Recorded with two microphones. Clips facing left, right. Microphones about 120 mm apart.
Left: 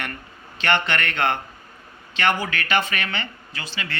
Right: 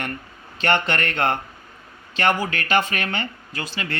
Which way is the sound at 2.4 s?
40° right (ahead or behind).